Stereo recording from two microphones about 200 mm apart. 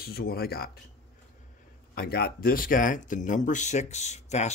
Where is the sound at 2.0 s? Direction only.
50° left (ahead or behind).